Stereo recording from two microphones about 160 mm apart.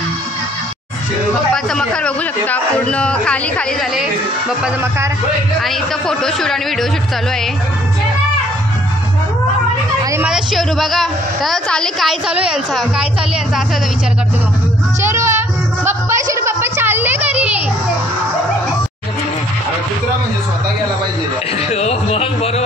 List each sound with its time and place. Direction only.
1.5 s a man's voice: 5° left (ahead or behind)
5.6 s a woman's voice: centre (ahead or behind)
10.2 s a woman's voice: centre (ahead or behind)
15.0 s music: 15° right (ahead or behind)
21.5 s a sound: 40° left (ahead or behind)